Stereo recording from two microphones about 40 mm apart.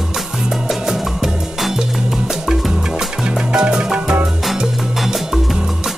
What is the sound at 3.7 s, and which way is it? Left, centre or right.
Music, right.